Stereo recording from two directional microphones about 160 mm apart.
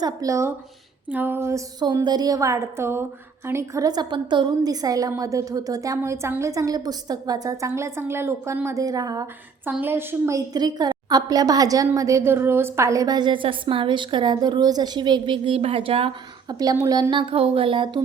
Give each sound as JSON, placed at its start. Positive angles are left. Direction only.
{"t": 0.0, "sound": "a woman's voice", "side_deg": -20}
{"t": 9.6, "sound": "a woman's voice", "side_deg": -10}
{"t": 16.6, "sound": "a woman's voice", "side_deg": -20}